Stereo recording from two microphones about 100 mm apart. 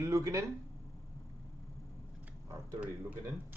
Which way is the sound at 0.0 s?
35° right (ahead or behind).